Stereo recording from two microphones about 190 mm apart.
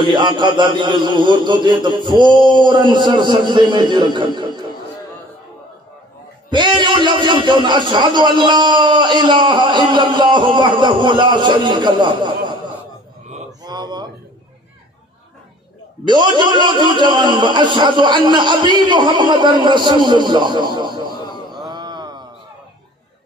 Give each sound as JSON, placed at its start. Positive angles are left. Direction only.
{"t": 0.1, "sound": "a man's voice", "side_deg": -25}
{"t": 6.5, "sound": "a man's voice", "side_deg": -25}
{"t": 13.5, "sound": "a sound", "side_deg": -20}
{"t": 16.1, "sound": "a man's voice", "side_deg": -25}
{"t": 21.6, "sound": "mantra", "side_deg": -20}